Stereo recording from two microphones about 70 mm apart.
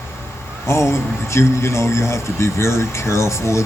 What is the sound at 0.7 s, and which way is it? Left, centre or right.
A man's voice, left.